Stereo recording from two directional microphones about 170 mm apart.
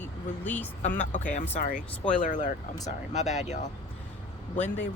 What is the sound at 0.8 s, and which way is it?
Speech, 50° left (ahead or behind).